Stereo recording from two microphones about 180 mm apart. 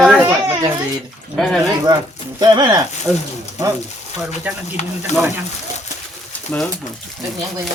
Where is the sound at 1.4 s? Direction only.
Centre (ahead or behind).